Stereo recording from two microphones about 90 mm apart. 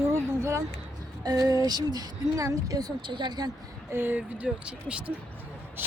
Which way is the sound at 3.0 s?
55° right (ahead or behind).